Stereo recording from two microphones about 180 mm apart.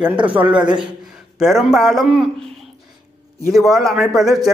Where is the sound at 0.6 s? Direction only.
25° right (ahead or behind).